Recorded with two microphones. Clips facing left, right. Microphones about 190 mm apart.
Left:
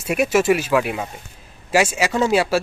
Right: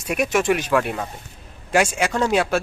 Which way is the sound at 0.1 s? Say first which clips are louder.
Left 3 dB; 5° left (ahead or behind).